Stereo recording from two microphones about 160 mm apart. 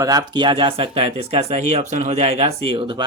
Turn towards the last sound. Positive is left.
turn(degrees=-30)  # may be behind; listen again after turning